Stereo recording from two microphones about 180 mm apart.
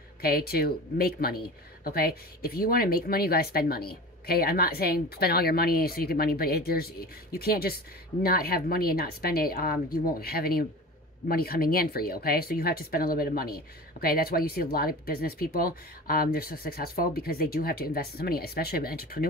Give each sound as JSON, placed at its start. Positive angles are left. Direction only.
{"t": 0.2, "sound": "speech", "side_deg": 55}